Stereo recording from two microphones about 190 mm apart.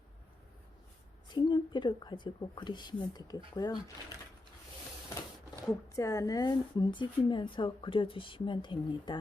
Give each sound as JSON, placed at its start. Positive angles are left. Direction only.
{"t": 1.3, "sound": "a woman's voice", "side_deg": 25}
{"t": 5.9, "sound": "a woman's voice", "side_deg": 15}